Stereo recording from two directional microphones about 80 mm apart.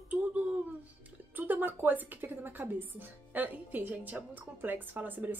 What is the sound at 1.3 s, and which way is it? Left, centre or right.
A woman's voice, right.